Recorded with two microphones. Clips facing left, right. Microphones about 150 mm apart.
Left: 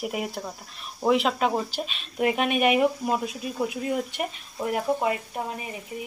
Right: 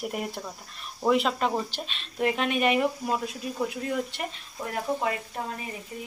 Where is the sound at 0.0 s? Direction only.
5° left (ahead or behind).